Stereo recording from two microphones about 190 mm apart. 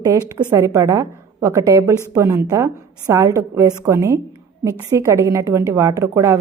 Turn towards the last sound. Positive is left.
turn(degrees=-15)  # may be behind; listen again after turning